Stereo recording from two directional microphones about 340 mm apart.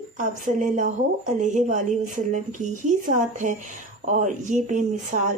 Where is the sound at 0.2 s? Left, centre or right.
Right.